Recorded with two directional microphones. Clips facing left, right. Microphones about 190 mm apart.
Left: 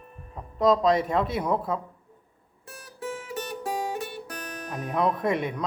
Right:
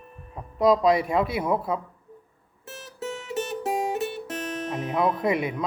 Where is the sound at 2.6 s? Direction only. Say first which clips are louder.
Right 2 dB; 25° right (ahead or behind).